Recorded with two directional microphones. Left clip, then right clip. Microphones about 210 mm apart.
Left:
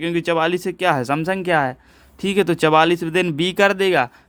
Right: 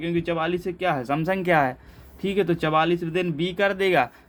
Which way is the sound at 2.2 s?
45° left (ahead or behind).